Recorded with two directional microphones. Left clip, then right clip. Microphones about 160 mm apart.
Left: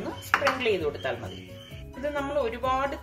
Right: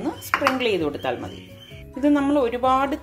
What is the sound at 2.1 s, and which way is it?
Speech, 55° right (ahead or behind).